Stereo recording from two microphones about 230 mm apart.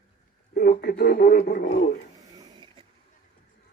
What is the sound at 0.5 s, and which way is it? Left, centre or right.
Speech, left.